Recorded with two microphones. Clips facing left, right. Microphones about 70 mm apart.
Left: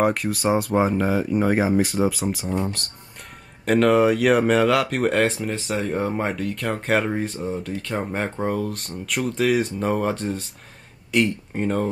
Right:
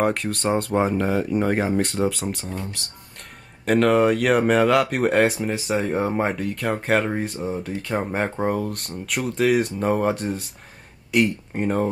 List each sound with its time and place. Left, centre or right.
0.0 s speech: centre
3.6 s speech: centre